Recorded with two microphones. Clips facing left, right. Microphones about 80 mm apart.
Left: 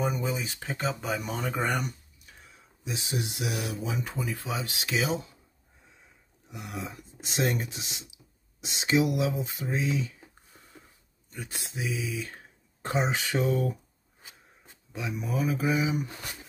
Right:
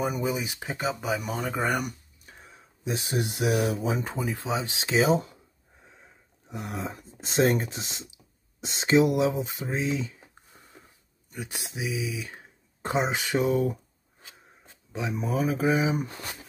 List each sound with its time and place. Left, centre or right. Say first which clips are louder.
0.0 s speech: right 2 dB; centre
2.2 s a sound: right 4 dB; right
2.9 s speech: right 4 dB; right
4.1 s speech: right 4 dB; right
6.5 s speech: right 4 dB; right
11.2 s speech: right 3 dB; centre
14.9 s speech: right 4 dB; right